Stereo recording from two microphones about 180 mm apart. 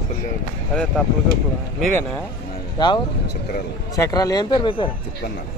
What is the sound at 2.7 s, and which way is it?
Speech, 25° left (ahead or behind).